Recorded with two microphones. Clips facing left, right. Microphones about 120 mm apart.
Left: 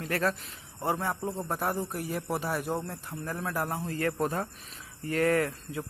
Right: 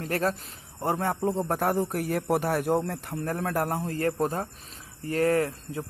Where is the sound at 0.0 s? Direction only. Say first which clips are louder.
Right 2 dB; 40° right (ahead or behind).